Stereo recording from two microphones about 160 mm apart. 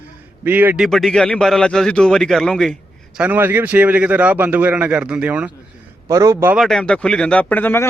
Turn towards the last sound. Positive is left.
turn(degrees=10)  # may be behind; listen again after turning